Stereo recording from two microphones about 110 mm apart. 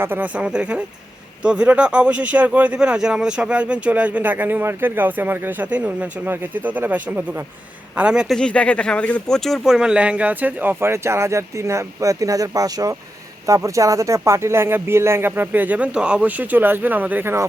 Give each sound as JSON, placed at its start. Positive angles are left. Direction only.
{"t": 0.0, "sound": "speech", "side_deg": -15}
{"t": 8.4, "sound": "speech", "side_deg": 10}